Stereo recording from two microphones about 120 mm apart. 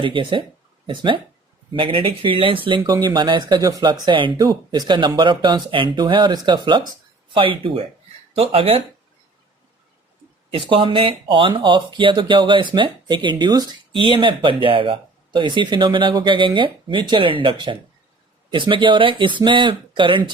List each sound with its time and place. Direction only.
0.0 s speech: 45° right (ahead or behind)
4.0 s speech: 40° right (ahead or behind)
10.5 s speech: 45° right (ahead or behind)